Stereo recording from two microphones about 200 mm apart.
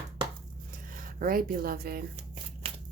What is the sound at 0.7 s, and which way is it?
Speech, 45° right (ahead or behind).